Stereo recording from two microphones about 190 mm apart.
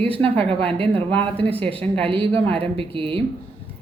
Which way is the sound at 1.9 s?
30° right (ahead or behind).